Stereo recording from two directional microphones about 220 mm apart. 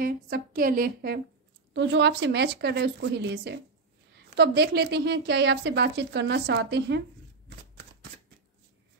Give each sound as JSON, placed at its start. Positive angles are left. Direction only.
{"t": 0.0, "sound": "a woman's voice", "side_deg": -40}
{"t": 1.7, "sound": "a woman's voice", "side_deg": -55}
{"t": 7.4, "sound": "shuffling cards", "side_deg": -50}